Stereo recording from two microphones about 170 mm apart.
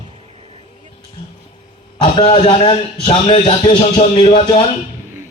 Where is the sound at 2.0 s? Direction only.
35° left (ahead or behind).